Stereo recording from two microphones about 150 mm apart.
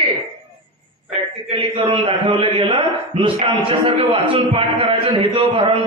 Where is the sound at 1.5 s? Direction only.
35° right (ahead or behind).